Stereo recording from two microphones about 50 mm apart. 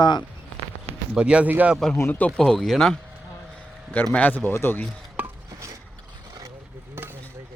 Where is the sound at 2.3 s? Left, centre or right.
Centre.